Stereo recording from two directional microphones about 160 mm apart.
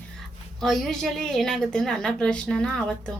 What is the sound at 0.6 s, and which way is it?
A woman's voice, centre (ahead or behind).